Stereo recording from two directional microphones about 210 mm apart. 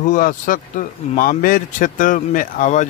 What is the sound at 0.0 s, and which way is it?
Speech, 40° left (ahead or behind).